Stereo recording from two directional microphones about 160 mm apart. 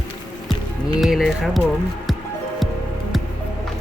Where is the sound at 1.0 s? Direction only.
Centre (ahead or behind).